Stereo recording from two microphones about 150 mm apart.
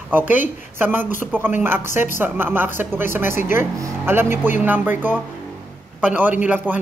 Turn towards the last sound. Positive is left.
turn(degrees=-10)  # may be behind; listen again after turning